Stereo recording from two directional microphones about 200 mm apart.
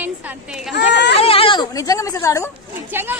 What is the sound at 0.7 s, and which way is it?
Speech, 60° left (ahead or behind).